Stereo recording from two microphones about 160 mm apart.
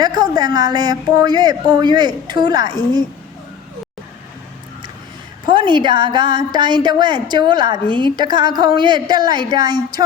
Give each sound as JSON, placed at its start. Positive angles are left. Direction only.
{"t": 0.0, "sound": "a woman's voice", "side_deg": -25}
{"t": 5.5, "sound": "a woman's voice", "side_deg": -30}